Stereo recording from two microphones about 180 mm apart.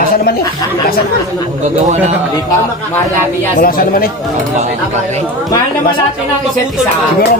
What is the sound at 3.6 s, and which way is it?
Speech, 55° left (ahead or behind).